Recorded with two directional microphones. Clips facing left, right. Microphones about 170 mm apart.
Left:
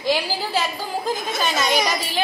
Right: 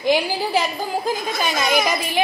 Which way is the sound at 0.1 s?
15° right (ahead or behind).